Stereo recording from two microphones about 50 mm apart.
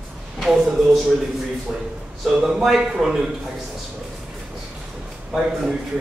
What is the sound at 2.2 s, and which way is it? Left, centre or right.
Speech, centre.